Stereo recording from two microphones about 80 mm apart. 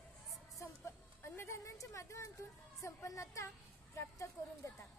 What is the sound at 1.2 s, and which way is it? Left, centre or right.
A woman's voice, left.